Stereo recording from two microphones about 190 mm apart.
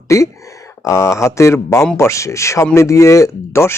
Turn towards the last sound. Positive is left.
turn(degrees=15)  # may be behind; listen again after turning